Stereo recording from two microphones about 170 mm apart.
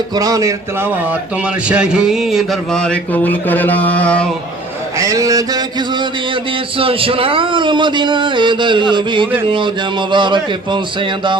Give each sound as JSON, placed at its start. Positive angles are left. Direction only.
{"t": 0.2, "sound": "speech", "side_deg": -20}
{"t": 1.6, "sound": "speech", "side_deg": -5}
{"t": 4.9, "sound": "speech", "side_deg": -20}
{"t": 6.7, "sound": "speech", "side_deg": -30}